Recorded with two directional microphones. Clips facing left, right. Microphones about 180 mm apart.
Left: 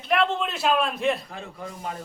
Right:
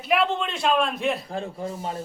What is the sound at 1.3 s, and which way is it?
Speech, 30° right (ahead or behind).